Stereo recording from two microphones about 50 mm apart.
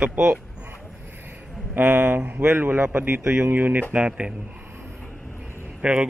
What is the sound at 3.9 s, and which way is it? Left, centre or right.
Speech, right.